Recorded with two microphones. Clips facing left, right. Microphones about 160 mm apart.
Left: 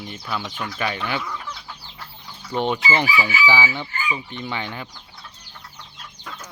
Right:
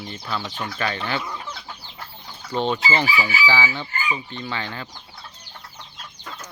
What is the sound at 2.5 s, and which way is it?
Chicken, 15° left (ahead or behind).